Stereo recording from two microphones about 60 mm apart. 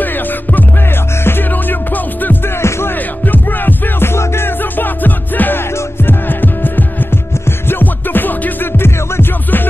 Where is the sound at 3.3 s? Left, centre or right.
Left.